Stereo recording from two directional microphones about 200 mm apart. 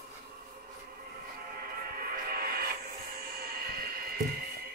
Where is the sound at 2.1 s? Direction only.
50° right (ahead or behind).